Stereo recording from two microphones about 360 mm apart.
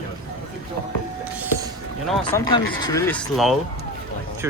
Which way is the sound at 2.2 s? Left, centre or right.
Centre.